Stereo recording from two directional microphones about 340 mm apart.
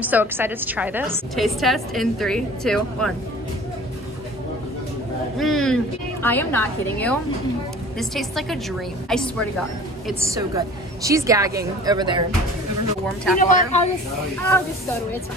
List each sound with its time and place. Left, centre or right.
0.0 s a woman's voice: centre
5.4 s a woman's voice: centre
10.3 s a woman's voice: centre
13.4 s speech: left
14.4 s speech: centre